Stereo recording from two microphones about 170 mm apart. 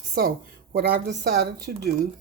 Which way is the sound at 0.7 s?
75° right (ahead or behind).